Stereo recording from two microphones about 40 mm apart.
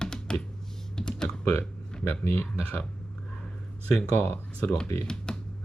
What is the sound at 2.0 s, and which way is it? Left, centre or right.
Speech, left.